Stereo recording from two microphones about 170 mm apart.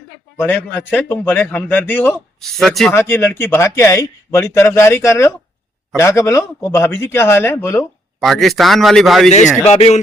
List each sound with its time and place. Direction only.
0.3 s a man's voice: 10° left (ahead or behind)
2.9 s a man's voice: 15° left (ahead or behind)
8.2 s a man's voice: centre (ahead or behind)
9.3 s speech: 40° left (ahead or behind)